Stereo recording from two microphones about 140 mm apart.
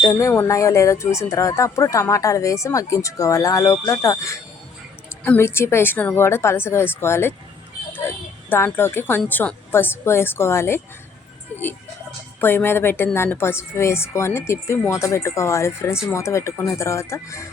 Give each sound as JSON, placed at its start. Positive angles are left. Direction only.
{"t": 0.0, "sound": "a woman's voice", "side_deg": 25}
{"t": 12.4, "sound": "a woman's voice", "side_deg": 15}